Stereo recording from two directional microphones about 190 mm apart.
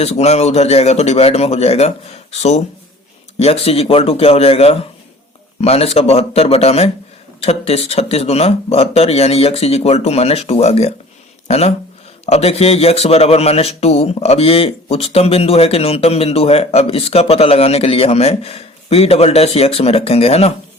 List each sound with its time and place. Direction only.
0.0 s a man's voice: 35° left (ahead or behind)